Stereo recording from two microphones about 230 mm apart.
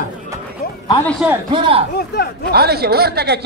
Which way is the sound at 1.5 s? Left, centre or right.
Right.